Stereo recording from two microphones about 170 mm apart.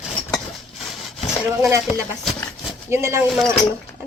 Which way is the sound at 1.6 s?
15° right (ahead or behind).